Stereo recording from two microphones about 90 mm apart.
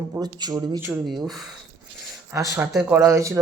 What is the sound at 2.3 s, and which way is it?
Speech, 40° right (ahead or behind).